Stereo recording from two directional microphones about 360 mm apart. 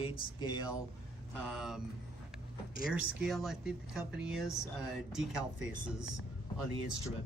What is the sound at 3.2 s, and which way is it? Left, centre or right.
Speech, centre.